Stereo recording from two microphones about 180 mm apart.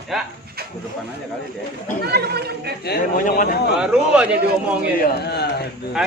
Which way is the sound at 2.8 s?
60° left (ahead or behind).